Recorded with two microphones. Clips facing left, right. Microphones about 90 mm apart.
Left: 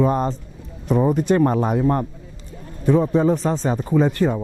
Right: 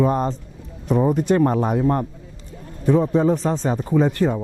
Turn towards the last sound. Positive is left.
turn(degrees=20)  # may be behind; listen again after turning